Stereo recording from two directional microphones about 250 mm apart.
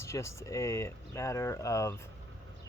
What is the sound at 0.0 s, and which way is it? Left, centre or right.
Speech, centre.